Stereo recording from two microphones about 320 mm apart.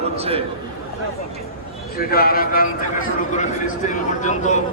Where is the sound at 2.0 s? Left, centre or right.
Left.